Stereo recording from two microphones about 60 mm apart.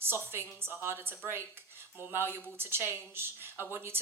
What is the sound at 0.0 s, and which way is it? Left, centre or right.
Speech, right.